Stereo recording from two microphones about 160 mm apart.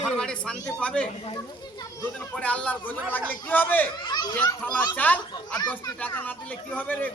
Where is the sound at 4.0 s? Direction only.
25° left (ahead or behind).